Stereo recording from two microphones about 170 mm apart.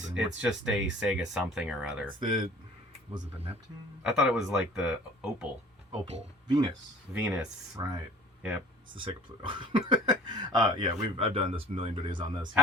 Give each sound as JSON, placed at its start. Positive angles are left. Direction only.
{"t": 0.2, "sound": "speech", "side_deg": -5}
{"t": 2.0, "sound": "speech", "side_deg": -30}
{"t": 4.0, "sound": "speech", "side_deg": -5}
{"t": 7.1, "sound": "speech", "side_deg": -10}
{"t": 9.0, "sound": "speech", "side_deg": -30}